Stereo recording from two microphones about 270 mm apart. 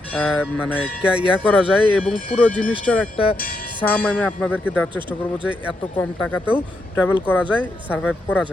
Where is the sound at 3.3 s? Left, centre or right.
Left.